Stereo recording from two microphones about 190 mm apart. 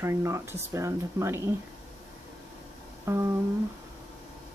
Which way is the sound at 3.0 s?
15° right (ahead or behind).